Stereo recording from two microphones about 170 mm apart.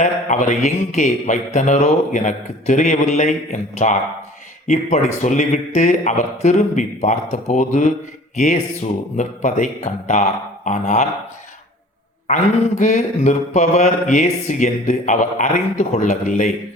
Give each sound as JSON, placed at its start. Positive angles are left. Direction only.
{"t": 0.0, "sound": "mantra", "side_deg": 45}
{"t": 12.8, "sound": "mantra", "side_deg": 45}